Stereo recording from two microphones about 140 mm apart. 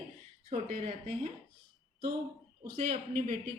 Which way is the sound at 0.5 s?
50° right (ahead or behind).